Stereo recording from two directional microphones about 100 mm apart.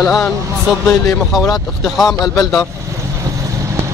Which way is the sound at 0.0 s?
5° left (ahead or behind).